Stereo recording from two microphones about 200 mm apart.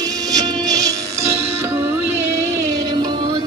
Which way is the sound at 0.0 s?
20° right (ahead or behind).